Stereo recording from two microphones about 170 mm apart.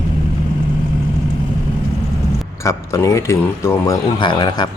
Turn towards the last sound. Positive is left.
turn(degrees=25)  # may be behind; listen again after turning